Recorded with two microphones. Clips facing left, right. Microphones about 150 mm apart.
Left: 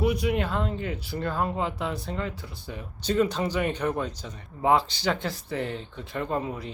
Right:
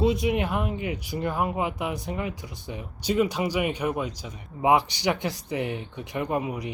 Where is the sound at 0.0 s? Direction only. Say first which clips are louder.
Right 2 dB; 20° right (ahead or behind).